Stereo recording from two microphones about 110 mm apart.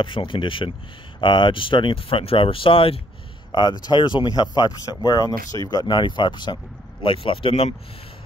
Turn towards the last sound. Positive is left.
turn(degrees=60)  # may be behind; listen again after turning